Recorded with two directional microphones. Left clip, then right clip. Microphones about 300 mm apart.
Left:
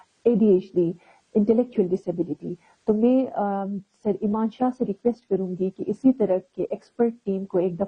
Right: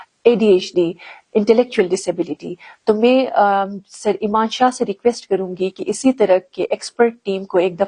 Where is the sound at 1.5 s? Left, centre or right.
Centre.